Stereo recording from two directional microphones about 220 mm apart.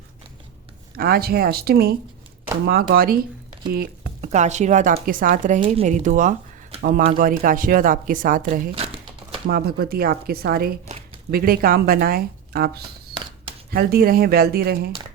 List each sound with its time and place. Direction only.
0.9 s speech: 45° right (ahead or behind)
5.5 s speech: 25° right (ahead or behind)
8.7 s speech: 25° right (ahead or behind)
9.5 s speech: 45° right (ahead or behind)